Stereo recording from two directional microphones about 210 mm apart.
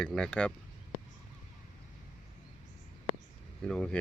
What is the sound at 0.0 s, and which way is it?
Speech, 5° left (ahead or behind).